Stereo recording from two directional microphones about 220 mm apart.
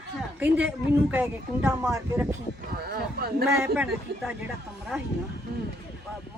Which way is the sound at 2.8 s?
45° right (ahead or behind).